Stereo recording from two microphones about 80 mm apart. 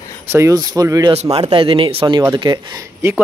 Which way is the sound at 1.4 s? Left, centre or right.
Right.